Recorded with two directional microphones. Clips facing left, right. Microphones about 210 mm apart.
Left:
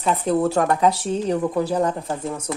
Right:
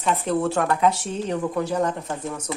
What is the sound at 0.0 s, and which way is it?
Speech, 35° left (ahead or behind).